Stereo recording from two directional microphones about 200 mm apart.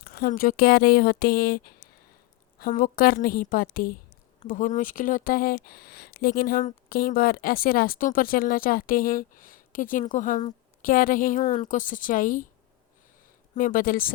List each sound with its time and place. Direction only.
0.0 s speech: 50° left (ahead or behind)
13.6 s speech: 45° left (ahead or behind)